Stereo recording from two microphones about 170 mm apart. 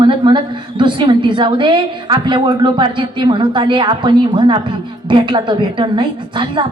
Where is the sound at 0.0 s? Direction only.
30° right (ahead or behind).